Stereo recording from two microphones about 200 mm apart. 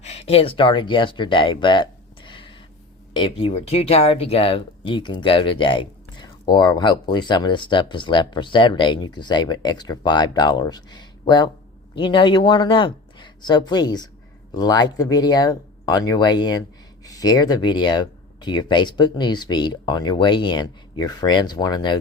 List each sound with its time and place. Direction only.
0.0 s speech: 30° left (ahead or behind)